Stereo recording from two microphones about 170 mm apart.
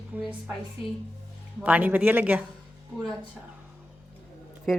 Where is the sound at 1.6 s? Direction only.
10° right (ahead or behind).